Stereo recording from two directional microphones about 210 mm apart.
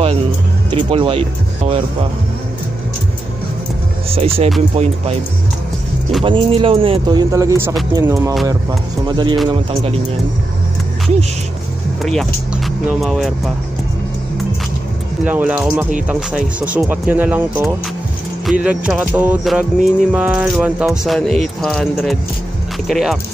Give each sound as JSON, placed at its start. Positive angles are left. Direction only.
{"t": 0.7, "sound": "speech", "side_deg": -25}
{"t": 4.1, "sound": "speech", "side_deg": -30}
{"t": 6.2, "sound": "speech", "side_deg": -25}
{"t": 12.0, "sound": "speech", "side_deg": 0}
{"t": 15.2, "sound": "speech", "side_deg": -5}
{"t": 18.4, "sound": "music", "side_deg": -5}